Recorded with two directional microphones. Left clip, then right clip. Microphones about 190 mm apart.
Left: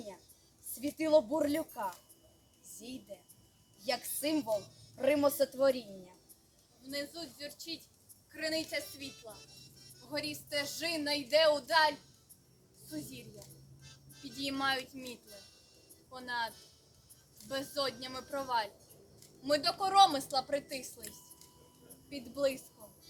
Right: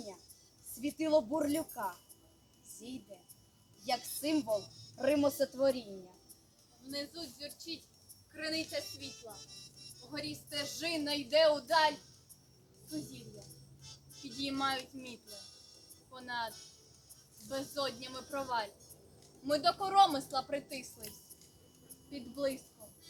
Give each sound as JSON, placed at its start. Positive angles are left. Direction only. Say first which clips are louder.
{"t": 0.8, "sound": "a woman's voice", "louder": "left 3 dB", "side_deg": 5}
{"t": 3.8, "sound": "a woman's voice", "louder": "left 1 dB", "side_deg": 10}
{"t": 6.9, "sound": "a woman's voice", "louder": "left 2 dB", "side_deg": 15}
{"t": 9.3, "sound": "music", "louder": "right 2 dB", "side_deg": -45}
{"t": 10.1, "sound": "a woman's voice", "louder": "left 5 dB", "side_deg": 20}
{"t": 13.8, "sound": "music", "louder": "right 1 dB", "side_deg": -50}
{"t": 14.3, "sound": "a woman's voice", "louder": "left 1 dB", "side_deg": 10}
{"t": 15.3, "sound": "music", "louder": "right 3 dB", "side_deg": -50}
{"t": 16.1, "sound": "a woman's voice", "louder": "left 2 dB", "side_deg": 10}
{"t": 16.5, "sound": "speech", "louder": "right 2 dB", "side_deg": -50}
{"t": 17.5, "sound": "a woman's voice", "louder": "left 2 dB", "side_deg": 10}
{"t": 22.1, "sound": "a woman's voice", "louder": "left 3 dB", "side_deg": 25}